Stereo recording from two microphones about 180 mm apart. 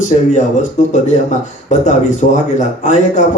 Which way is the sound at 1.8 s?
45° left (ahead or behind).